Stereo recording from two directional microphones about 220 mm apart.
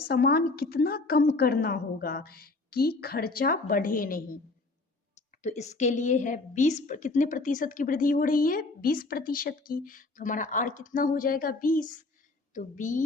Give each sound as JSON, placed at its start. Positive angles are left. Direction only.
{"t": 0.1, "sound": "a woman's voice", "side_deg": 45}
{"t": 5.4, "sound": "a woman's voice", "side_deg": 30}